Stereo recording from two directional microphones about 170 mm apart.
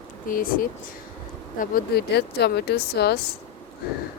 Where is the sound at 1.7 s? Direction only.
75° left (ahead or behind).